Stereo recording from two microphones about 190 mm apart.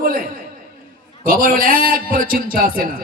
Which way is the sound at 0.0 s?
50° right (ahead or behind).